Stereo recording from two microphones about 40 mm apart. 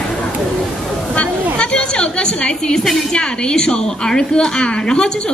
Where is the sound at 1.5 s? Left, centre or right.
Left.